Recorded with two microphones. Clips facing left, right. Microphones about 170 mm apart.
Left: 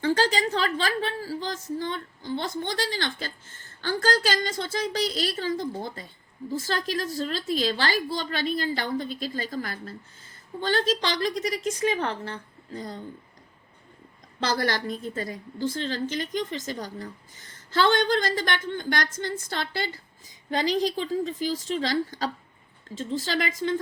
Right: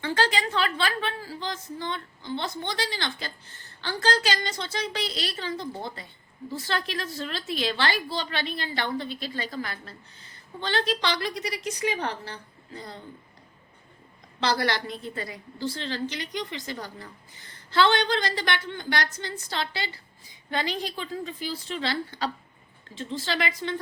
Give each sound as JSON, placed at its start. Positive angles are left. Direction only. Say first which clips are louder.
{"t": 0.0, "sound": "a woman's voice", "louder": "left 3 dB", "side_deg": 40}
{"t": 14.4, "sound": "a woman's voice", "louder": "even", "side_deg": 45}